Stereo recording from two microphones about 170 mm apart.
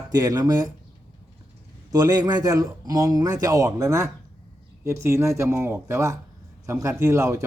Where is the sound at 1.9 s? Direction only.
20° right (ahead or behind).